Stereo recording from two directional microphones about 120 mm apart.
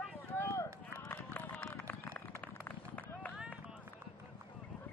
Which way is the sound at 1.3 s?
10° left (ahead or behind).